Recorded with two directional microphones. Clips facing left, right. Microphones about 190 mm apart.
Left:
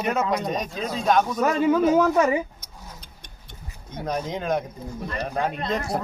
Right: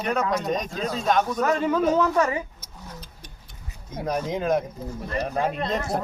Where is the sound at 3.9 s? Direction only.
5° right (ahead or behind).